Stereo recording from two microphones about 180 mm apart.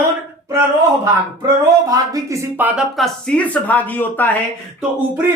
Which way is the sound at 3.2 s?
5° left (ahead or behind).